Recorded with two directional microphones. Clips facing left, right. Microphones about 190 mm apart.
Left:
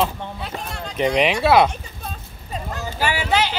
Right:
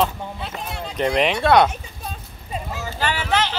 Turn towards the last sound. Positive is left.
turn(degrees=10)  # may be behind; listen again after turning